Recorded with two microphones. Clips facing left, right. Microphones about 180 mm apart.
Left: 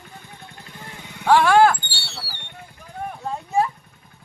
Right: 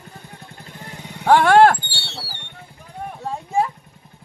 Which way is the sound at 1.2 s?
55° right (ahead or behind).